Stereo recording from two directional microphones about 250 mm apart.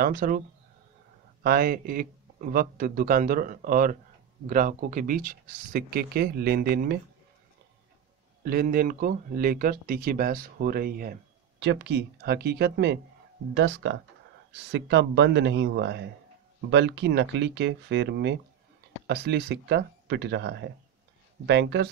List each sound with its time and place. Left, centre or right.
0.0 s speech: right
1.4 s speech: right
8.5 s speech: right